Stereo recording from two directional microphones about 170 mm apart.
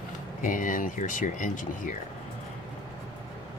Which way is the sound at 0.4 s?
50° left (ahead or behind).